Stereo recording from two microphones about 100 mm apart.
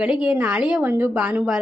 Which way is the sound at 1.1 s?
10° right (ahead or behind).